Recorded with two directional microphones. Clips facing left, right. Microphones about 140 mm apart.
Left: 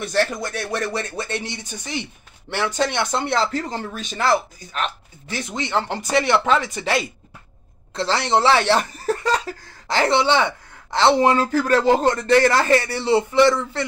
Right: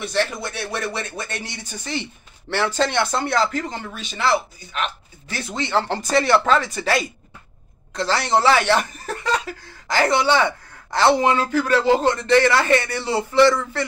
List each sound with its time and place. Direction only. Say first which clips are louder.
0.0 s a man's voice: left 2 dB; 45° left (ahead or behind)
5.3 s speech: right 1 dB; 20° left (ahead or behind)
11.2 s a man's voice: left 1 dB; 40° left (ahead or behind); by 13.8 s 20° left (ahead or behind)